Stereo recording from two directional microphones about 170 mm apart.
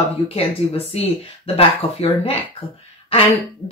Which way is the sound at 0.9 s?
35° left (ahead or behind).